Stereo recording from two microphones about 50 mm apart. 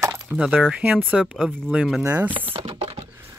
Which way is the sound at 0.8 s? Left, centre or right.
Right.